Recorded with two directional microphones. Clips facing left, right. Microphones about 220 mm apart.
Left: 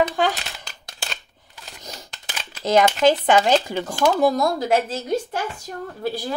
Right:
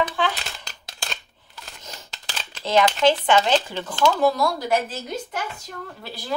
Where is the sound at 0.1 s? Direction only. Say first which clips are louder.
Left 3 dB; 45° left (ahead or behind).